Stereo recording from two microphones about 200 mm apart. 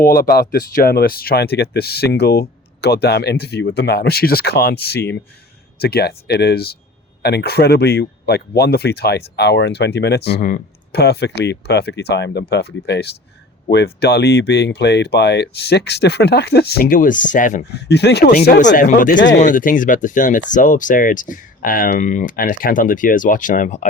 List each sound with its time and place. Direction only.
0.0 s speech: 50° left (ahead or behind)
17.7 s speech: 55° left (ahead or behind)
19.1 s speech: 65° left (ahead or behind)
19.4 s speech: 45° left (ahead or behind)